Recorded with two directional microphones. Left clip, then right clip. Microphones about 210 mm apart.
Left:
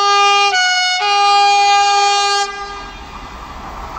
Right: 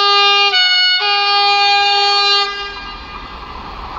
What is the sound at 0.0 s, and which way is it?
Emergency vehicle, 25° left (ahead or behind).